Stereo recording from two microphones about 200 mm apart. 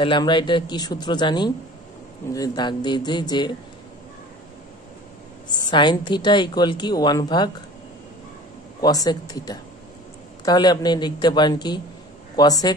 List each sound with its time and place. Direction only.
0.0 s a woman's voice: 25° left (ahead or behind)
5.7 s a woman's voice: 20° left (ahead or behind)
8.8 s a woman's voice: 20° left (ahead or behind)